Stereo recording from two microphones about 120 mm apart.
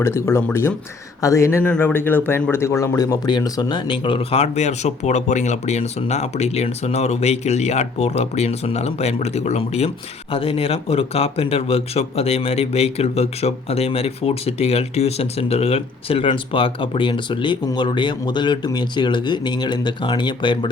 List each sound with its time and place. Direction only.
0.0 s speech: 20° left (ahead or behind); by 9.9 s 65° left (ahead or behind)
10.3 s a man's voice: 50° left (ahead or behind)